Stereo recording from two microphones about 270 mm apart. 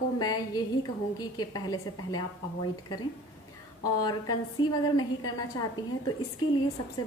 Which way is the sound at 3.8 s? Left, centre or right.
Centre.